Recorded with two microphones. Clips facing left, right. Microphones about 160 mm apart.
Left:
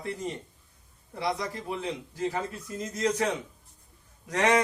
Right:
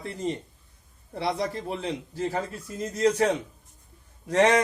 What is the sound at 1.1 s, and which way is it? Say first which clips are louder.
A man's voice: right 3 dB; 30° right (ahead or behind).